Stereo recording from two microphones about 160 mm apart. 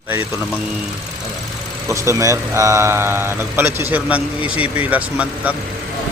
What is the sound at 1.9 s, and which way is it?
Speech, 20° right (ahead or behind).